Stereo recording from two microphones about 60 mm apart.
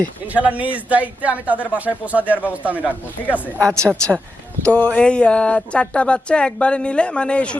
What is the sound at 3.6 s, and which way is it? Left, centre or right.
Speech, centre.